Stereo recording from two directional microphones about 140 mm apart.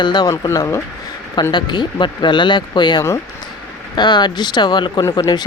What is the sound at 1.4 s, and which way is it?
Speech, 30° left (ahead or behind).